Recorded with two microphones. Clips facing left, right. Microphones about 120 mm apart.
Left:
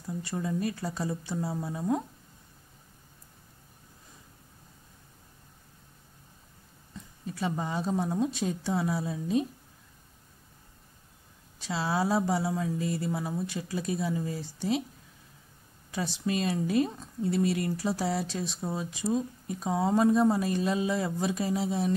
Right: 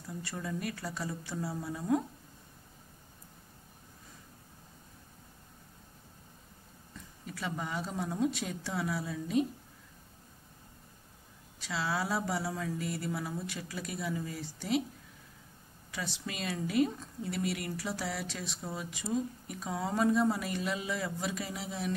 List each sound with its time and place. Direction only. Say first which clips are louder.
0.2 s speech: left 6 dB; 25° left (ahead or behind)
7.2 s speech: left 6 dB; 30° left (ahead or behind)
11.6 s speech: left 5 dB; 30° left (ahead or behind)
15.9 s speech: left 9 dB; 30° left (ahead or behind)